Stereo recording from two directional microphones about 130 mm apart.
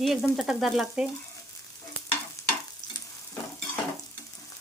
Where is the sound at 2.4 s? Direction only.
25° left (ahead or behind).